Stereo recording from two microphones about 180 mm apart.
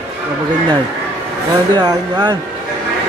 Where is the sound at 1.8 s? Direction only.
25° right (ahead or behind).